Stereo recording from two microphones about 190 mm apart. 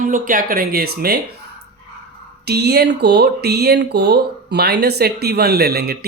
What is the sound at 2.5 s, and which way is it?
Speech, 60° right (ahead or behind).